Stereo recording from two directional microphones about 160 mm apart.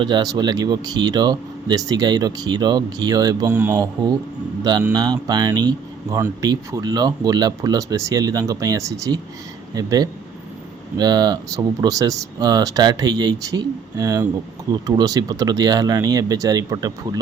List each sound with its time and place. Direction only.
0.0 s speech: 25° right (ahead or behind)
4.9 s speech: 25° right (ahead or behind)